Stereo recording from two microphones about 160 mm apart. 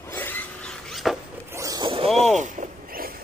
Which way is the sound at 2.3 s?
55° right (ahead or behind).